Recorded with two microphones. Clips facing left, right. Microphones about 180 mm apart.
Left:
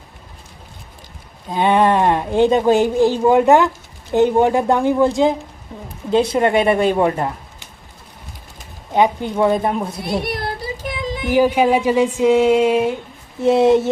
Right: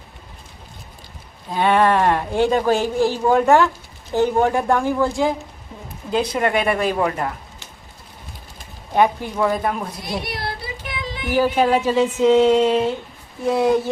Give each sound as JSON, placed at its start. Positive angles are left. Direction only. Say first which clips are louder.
{"t": 1.5, "sound": "speech", "louder": "left 2 dB", "side_deg": 20}
{"t": 9.0, "sound": "speech", "louder": "left 2 dB", "side_deg": 20}
{"t": 10.2, "sound": "child singing", "louder": "left 4 dB", "side_deg": 50}
{"t": 11.3, "sound": "speech", "louder": "left 3 dB", "side_deg": 15}
{"t": 13.4, "sound": "speech", "louder": "left 5 dB", "side_deg": 25}